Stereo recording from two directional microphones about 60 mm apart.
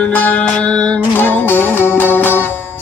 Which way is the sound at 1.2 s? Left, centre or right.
Left.